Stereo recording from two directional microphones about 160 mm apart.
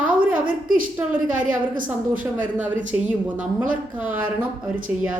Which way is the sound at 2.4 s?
10° right (ahead or behind).